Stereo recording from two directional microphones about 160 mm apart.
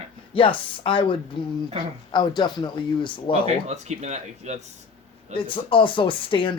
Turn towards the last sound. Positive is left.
turn(degrees=30)  # may be behind; listen again after turning